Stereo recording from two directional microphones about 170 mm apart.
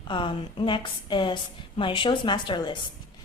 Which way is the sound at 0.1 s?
30° left (ahead or behind).